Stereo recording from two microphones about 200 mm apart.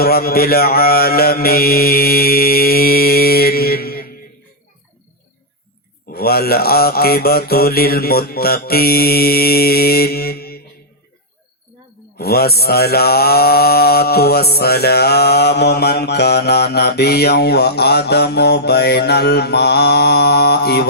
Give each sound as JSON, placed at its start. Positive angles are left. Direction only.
{"t": 0.0, "sound": "mantra", "side_deg": 50}
{"t": 6.1, "sound": "mantra", "side_deg": 50}
{"t": 12.1, "sound": "mantra", "side_deg": 50}